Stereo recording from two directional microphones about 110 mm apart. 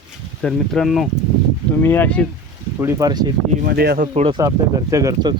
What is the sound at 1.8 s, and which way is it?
Speech, 20° left (ahead or behind).